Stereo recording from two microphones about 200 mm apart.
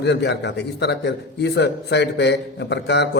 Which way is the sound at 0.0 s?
60° left (ahead or behind).